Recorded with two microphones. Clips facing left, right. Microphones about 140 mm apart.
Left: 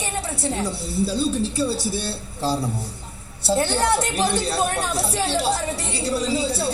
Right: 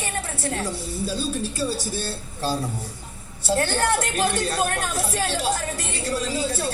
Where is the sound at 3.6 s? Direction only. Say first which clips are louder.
Left 2 dB; 15° left (ahead or behind).